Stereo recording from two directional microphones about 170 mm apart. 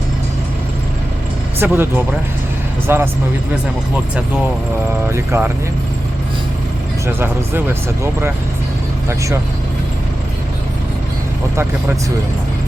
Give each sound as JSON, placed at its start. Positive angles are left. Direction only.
{"t": 1.5, "sound": "speech", "side_deg": -10}
{"t": 5.0, "sound": "speech", "side_deg": -15}
{"t": 7.1, "sound": "speech", "side_deg": -15}